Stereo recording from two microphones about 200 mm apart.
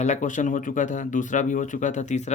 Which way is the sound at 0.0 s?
35° left (ahead or behind).